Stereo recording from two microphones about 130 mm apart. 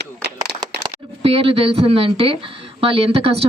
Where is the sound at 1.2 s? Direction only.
45° right (ahead or behind).